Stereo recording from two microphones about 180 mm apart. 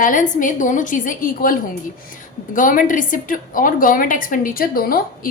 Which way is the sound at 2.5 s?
50° left (ahead or behind).